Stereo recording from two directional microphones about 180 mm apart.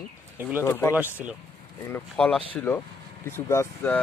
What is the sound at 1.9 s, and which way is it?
Speech, 5° left (ahead or behind).